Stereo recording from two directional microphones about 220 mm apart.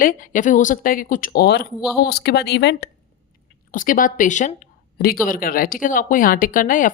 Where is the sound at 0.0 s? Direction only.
35° left (ahead or behind).